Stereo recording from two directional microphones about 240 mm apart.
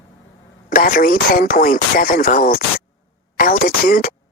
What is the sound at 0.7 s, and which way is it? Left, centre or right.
Speech, left.